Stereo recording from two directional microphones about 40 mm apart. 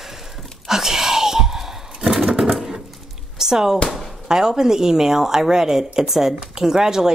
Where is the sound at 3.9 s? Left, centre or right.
Centre.